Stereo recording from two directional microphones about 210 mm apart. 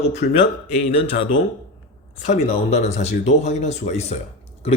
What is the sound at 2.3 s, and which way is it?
A man's voice, 30° left (ahead or behind).